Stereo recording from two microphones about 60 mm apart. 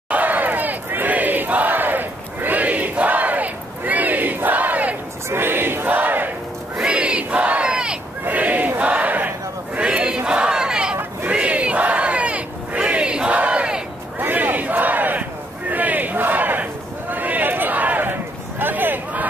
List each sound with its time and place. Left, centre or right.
0.1 s battle cry: right
5.3 s a sound: right
6.8 s battle cry: centre
8.3 s battle cry: right
9.8 s crowd: centre
11.2 s battle cry: right
14.2 s battle cry: right
17.1 s a sound: right